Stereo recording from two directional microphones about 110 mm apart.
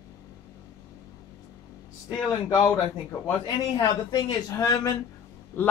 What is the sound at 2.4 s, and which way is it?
Speech, 35° left (ahead or behind).